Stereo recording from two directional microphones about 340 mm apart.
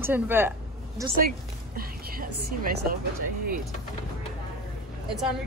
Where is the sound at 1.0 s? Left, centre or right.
Right.